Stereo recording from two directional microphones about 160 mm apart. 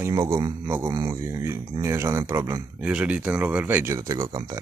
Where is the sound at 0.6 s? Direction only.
15° right (ahead or behind).